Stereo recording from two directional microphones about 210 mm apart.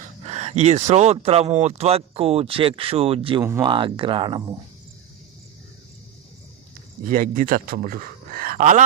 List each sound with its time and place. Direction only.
0.2 s speech: 30° right (ahead or behind)
3.4 s speech: 10° right (ahead or behind)
3.7 s speech: 25° right (ahead or behind)
7.0 s a man's voice: 40° right (ahead or behind)